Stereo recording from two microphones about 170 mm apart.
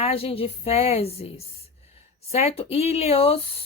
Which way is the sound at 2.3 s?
35° left (ahead or behind).